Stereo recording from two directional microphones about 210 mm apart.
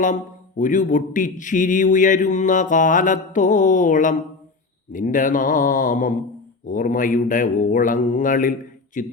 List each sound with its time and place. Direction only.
0.0 s speech: 40° left (ahead or behind)